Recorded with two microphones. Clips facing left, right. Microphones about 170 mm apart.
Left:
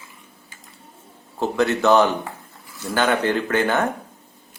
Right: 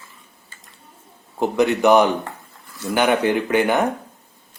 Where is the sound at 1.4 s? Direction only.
15° right (ahead or behind).